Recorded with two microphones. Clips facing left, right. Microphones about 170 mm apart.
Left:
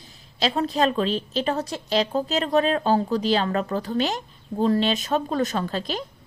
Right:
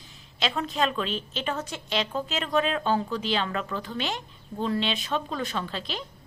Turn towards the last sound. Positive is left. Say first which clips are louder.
# left 6 dB
turn(degrees=45)  # may be behind; listen again after turning